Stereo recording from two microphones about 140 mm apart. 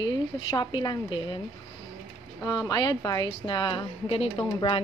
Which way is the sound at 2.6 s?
30° left (ahead or behind).